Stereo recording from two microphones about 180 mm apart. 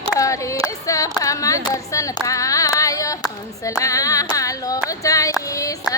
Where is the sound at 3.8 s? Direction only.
20° left (ahead or behind).